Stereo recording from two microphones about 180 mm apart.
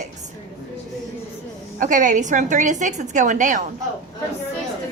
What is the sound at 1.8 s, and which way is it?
A woman's voice, 45° right (ahead or behind).